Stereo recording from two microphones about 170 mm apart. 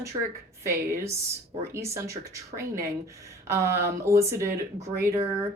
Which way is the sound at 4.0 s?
15° right (ahead or behind).